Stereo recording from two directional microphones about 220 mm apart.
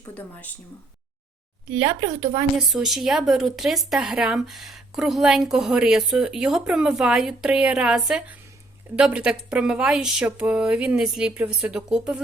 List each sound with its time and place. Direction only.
0.1 s speech: 5° left (ahead or behind)
1.8 s speech: 20° right (ahead or behind)
2.6 s speech: centre (ahead or behind)